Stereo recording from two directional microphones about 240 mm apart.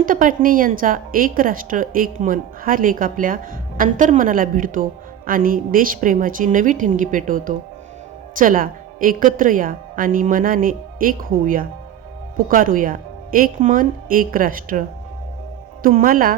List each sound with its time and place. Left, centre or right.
0.0 s speech: right